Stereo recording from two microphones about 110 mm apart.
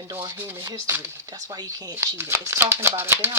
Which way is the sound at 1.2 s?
35° right (ahead or behind).